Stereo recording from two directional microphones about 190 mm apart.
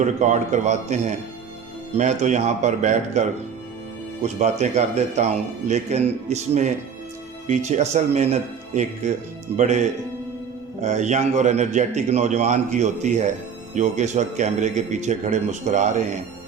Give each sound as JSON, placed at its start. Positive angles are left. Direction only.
{"t": 0.0, "sound": "a man's voice", "side_deg": -40}
{"t": 10.8, "sound": "a man's voice", "side_deg": -40}